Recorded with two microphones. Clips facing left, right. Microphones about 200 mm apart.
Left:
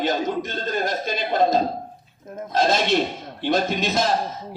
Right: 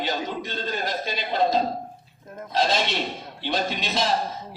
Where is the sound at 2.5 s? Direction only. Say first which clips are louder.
Left 4 dB; 45° left (ahead or behind).